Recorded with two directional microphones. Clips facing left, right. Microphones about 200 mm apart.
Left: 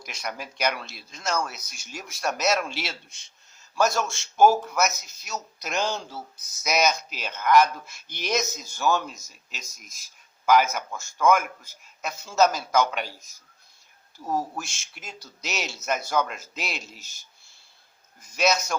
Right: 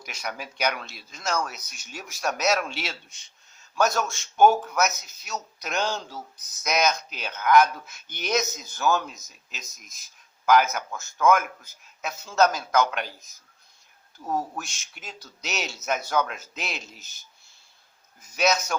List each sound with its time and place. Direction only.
0.0 s speech: centre (ahead or behind)
10.4 s speech: centre (ahead or behind)
14.3 s speech: centre (ahead or behind)
18.2 s speech: centre (ahead or behind)